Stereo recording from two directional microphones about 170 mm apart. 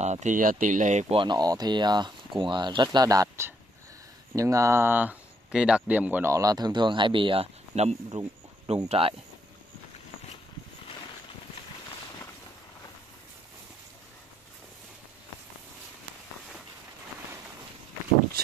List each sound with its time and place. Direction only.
0.0 s speech: 45° right (ahead or behind)